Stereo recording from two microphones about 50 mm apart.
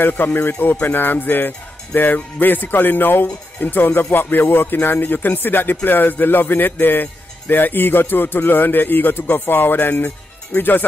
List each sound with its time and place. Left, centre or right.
0.0 s a man's voice: left
2.1 s speech: left
2.5 s a man's voice: left